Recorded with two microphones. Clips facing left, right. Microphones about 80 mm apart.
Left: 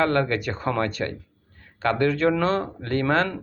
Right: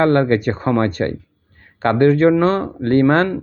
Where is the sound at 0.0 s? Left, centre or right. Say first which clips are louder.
Right 8 dB; right.